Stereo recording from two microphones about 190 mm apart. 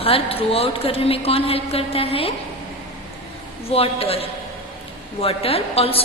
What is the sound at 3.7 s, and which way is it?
A woman's voice, 30° left (ahead or behind).